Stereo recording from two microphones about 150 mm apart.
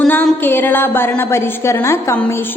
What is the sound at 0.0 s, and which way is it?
Music, 10° left (ahead or behind).